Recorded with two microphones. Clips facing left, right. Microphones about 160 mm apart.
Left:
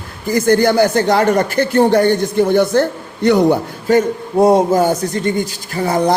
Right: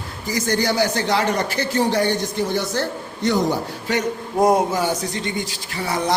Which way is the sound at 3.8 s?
45° left (ahead or behind).